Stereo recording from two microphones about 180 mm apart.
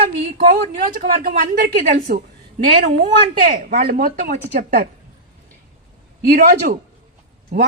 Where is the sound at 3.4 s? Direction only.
45° right (ahead or behind).